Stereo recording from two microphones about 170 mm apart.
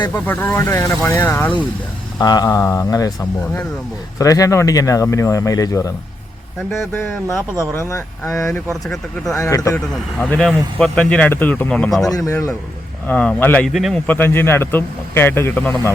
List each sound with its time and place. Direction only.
0.0 s speech: 10° left (ahead or behind)
2.1 s speech: 25° left (ahead or behind)
4.2 s speech: 20° left (ahead or behind)
7.6 s speech: 15° left (ahead or behind)
8.7 s speech: centre (ahead or behind)
9.3 s speech: 20° left (ahead or behind); by 12.1 s centre (ahead or behind)
12.1 s speech: 20° left (ahead or behind); by 14.0 s centre (ahead or behind)
14.1 s speech: 15° left (ahead or behind)